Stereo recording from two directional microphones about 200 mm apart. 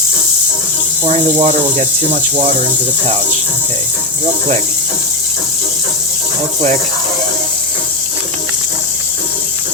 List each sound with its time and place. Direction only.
1.0 s speech: 30° right (ahead or behind)